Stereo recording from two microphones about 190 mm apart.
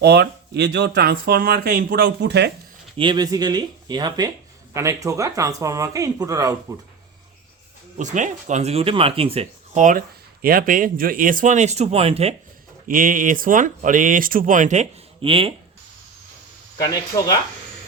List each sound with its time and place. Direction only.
0.0 s speech: 60° right (ahead or behind)
3.0 s speech: 25° right (ahead or behind)
7.9 s speech: 40° right (ahead or behind)
12.9 s speech: 45° right (ahead or behind); by 15.5 s 30° right (ahead or behind)
16.7 s speech: 20° left (ahead or behind)